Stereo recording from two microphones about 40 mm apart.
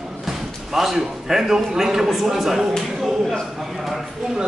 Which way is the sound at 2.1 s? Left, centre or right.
Centre.